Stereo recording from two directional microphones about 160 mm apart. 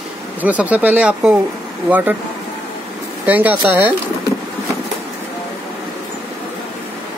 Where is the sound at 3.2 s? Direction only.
10° right (ahead or behind).